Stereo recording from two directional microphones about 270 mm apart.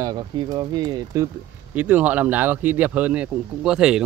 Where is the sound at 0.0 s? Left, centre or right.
Centre.